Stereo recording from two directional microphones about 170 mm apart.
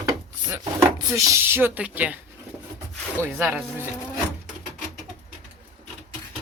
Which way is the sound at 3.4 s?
5° right (ahead or behind).